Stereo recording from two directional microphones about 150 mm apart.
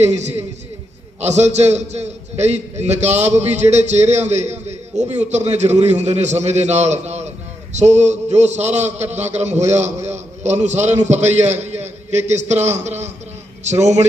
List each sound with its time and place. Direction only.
0.0 s a man's voice: 50° right (ahead or behind)